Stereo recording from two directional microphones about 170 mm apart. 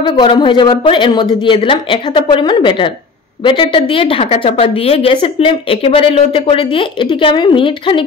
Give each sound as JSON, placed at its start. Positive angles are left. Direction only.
{"t": 0.0, "sound": "a woman's voice", "side_deg": 30}